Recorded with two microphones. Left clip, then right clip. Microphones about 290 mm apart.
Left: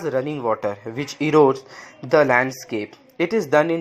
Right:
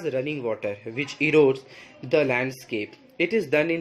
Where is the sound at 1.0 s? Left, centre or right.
Centre.